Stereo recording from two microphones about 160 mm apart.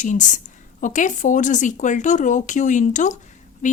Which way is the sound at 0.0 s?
50° left (ahead or behind).